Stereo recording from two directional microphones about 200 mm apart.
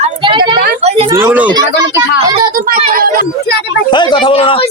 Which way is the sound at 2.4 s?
45° right (ahead or behind).